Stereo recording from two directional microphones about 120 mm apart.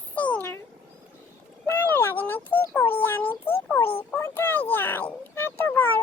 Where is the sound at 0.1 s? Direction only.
10° left (ahead or behind).